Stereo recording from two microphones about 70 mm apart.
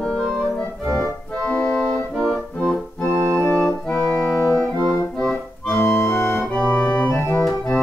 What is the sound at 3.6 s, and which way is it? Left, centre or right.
Organ, centre.